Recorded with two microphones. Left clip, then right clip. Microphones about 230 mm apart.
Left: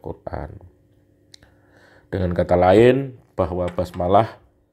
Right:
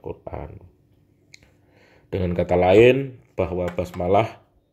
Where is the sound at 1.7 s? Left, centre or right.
Centre.